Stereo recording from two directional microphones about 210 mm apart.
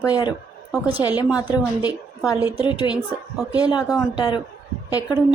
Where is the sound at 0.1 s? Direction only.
20° left (ahead or behind).